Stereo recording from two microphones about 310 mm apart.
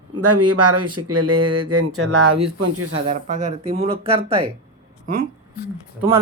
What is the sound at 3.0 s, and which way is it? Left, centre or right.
Speech, right.